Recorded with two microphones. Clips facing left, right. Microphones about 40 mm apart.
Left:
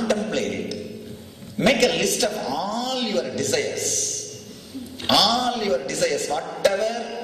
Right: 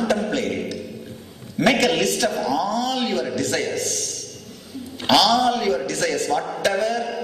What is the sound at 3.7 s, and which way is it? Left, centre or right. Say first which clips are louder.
A man's voice: right 1 dB; right.